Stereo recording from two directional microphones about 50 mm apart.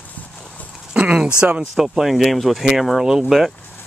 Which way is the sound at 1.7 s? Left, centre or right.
Centre.